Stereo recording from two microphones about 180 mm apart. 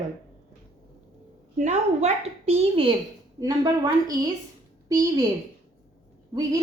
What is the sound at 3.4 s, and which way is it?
Speech, 20° right (ahead or behind).